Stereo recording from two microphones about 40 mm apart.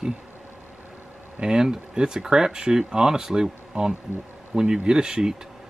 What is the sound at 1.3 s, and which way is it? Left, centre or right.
Speech, centre.